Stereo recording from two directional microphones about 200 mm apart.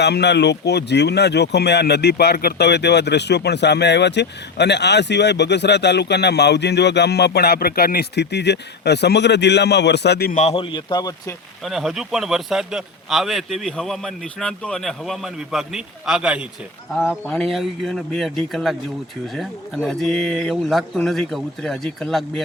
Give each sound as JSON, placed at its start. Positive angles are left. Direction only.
{"t": 0.0, "sound": "speech", "side_deg": 55}
{"t": 10.4, "sound": "a man's voice", "side_deg": 25}
{"t": 11.6, "sound": "speech", "side_deg": 0}